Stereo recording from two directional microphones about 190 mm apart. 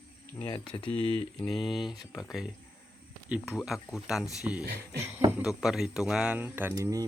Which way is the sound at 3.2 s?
5° right (ahead or behind).